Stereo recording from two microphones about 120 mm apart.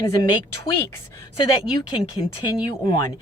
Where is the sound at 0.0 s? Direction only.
30° left (ahead or behind).